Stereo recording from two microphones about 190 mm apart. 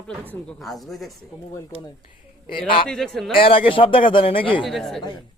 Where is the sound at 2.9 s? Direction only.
Centre (ahead or behind).